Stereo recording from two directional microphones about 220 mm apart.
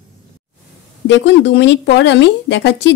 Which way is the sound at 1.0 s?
55° left (ahead or behind).